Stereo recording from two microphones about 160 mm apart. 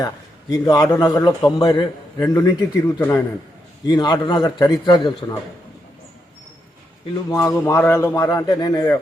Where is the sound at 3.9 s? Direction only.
25° left (ahead or behind).